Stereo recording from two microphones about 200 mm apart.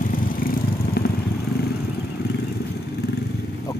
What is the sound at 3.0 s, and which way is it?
Vehicle, 55° left (ahead or behind).